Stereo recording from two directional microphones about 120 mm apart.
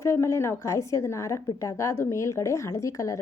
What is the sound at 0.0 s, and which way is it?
A woman's voice, 25° left (ahead or behind).